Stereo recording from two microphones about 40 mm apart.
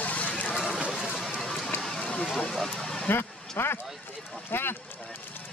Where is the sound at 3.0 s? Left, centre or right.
Left.